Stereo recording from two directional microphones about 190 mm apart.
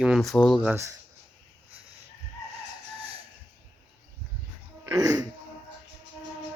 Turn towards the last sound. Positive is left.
turn(degrees=-20)  # may be behind; listen again after turning